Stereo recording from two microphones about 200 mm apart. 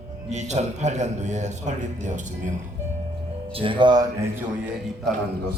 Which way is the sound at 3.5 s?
25° right (ahead or behind).